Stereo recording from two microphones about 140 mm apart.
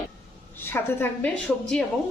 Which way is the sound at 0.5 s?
15° left (ahead or behind).